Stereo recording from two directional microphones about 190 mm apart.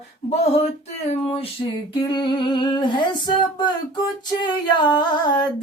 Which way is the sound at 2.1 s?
25° left (ahead or behind).